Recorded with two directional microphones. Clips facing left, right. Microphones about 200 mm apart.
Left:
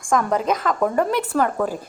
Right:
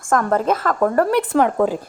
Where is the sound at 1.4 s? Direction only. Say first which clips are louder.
Right 4 dB; 15° right (ahead or behind).